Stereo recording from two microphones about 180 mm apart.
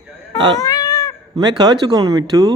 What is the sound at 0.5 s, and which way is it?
Cat, 20° left (ahead or behind).